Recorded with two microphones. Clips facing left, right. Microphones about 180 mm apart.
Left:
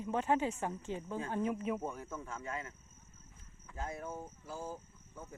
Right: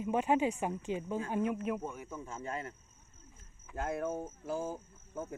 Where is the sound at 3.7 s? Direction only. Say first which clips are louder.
Right 7 dB; 65° right (ahead or behind).